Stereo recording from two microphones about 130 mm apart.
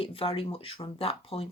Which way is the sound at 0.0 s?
45° left (ahead or behind).